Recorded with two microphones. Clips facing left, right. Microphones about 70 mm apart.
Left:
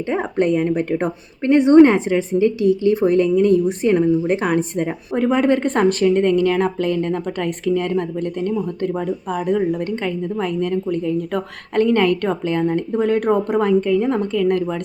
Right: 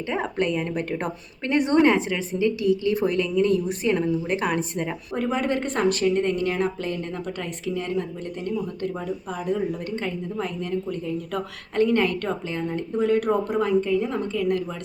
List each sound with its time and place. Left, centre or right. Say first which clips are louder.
0.1 s a woman's voice: left 6 dB; left